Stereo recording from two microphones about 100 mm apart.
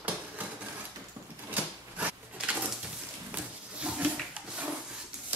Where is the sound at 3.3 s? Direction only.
15° right (ahead or behind).